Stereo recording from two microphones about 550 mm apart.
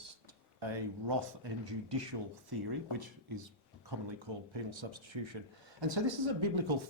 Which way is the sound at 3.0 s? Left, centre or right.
Right.